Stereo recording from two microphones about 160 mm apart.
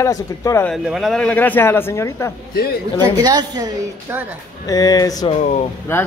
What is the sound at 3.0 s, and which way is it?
Speech, 25° right (ahead or behind).